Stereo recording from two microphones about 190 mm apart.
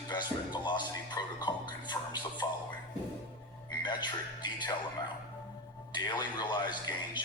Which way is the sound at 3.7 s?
25° left (ahead or behind).